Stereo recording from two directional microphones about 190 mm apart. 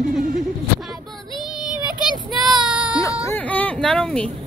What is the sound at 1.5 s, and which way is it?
Child singing, 25° left (ahead or behind).